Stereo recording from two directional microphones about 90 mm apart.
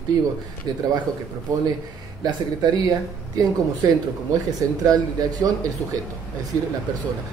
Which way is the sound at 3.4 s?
45° right (ahead or behind).